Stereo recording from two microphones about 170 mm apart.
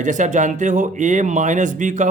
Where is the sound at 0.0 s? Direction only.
45° right (ahead or behind).